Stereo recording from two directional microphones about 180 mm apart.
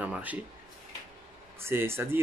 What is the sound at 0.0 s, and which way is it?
Speech, 10° right (ahead or behind).